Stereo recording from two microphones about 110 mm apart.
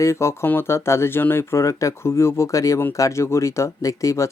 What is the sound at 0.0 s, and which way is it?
Speech, 25° left (ahead or behind).